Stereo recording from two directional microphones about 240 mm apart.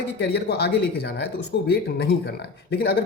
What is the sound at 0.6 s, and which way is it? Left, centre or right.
Speech, left.